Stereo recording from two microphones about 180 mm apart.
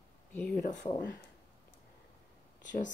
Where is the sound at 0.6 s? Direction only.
45° left (ahead or behind).